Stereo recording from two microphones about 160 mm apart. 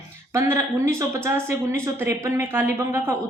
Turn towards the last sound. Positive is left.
turn(degrees=-15)  # may be behind; listen again after turning